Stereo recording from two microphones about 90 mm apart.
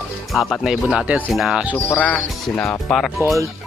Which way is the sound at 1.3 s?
5° right (ahead or behind).